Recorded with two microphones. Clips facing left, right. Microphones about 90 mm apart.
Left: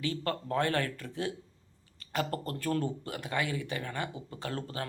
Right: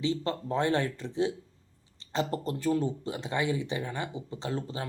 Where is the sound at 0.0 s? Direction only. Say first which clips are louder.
Right 3 dB; 20° right (ahead or behind).